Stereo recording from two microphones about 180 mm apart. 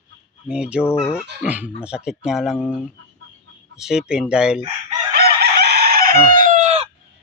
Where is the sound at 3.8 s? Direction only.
5° right (ahead or behind).